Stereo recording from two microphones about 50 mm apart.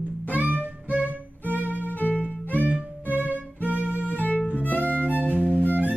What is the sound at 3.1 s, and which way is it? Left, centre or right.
Music, right.